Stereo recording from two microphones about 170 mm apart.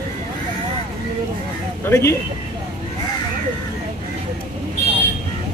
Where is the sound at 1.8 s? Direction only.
15° left (ahead or behind).